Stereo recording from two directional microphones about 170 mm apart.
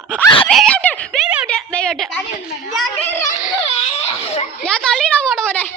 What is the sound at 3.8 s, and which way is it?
Speech, 35° left (ahead or behind).